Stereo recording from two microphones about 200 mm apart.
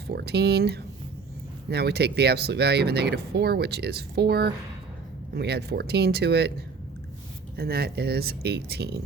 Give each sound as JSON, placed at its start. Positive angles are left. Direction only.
{"t": 0.1, "sound": "speech", "side_deg": -55}
{"t": 7.5, "sound": "speech", "side_deg": -50}